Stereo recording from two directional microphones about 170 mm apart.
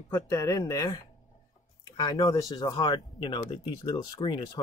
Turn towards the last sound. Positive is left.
turn(degrees=25)  # may be behind; listen again after turning